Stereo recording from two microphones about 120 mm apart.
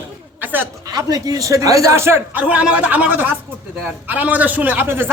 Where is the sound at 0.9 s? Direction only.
30° right (ahead or behind).